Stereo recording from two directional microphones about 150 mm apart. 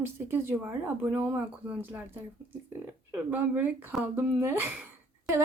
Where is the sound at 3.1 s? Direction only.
10° right (ahead or behind).